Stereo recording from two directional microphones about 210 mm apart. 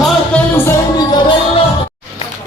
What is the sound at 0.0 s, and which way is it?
Music, 10° left (ahead or behind).